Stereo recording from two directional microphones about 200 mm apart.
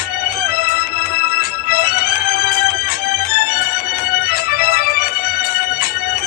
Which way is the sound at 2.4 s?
50° left (ahead or behind).